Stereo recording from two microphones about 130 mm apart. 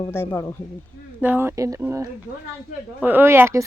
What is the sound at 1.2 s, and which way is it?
Speech, 15° right (ahead or behind).